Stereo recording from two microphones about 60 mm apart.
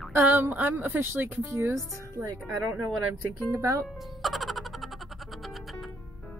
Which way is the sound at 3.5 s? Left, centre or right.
Right.